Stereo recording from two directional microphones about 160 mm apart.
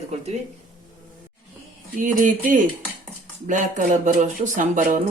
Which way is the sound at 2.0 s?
55° right (ahead or behind).